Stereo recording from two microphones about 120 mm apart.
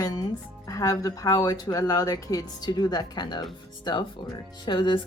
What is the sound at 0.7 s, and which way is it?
A woman's voice, 25° left (ahead or behind).